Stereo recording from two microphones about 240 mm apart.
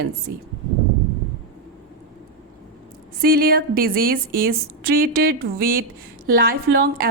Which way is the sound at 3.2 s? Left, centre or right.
Right.